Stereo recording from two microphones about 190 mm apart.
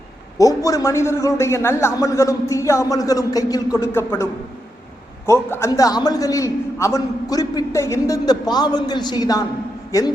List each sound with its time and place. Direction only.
0.3 s a man's voice: 15° left (ahead or behind)